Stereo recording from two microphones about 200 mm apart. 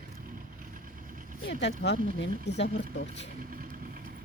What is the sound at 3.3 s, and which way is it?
Vehicle, 45° right (ahead or behind).